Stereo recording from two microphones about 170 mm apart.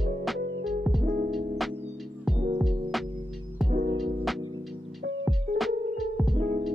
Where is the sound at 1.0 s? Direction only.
50° right (ahead or behind).